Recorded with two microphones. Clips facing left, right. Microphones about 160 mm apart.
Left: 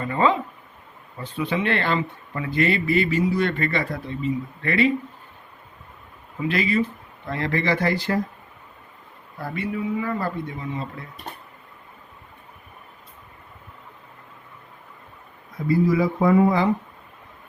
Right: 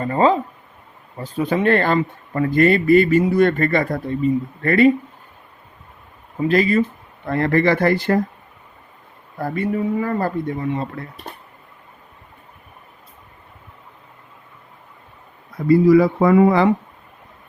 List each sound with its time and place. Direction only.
0.0 s speech: 40° right (ahead or behind)
6.4 s speech: 40° right (ahead or behind)
9.4 s speech: 45° right (ahead or behind)
15.7 s speech: 65° right (ahead or behind)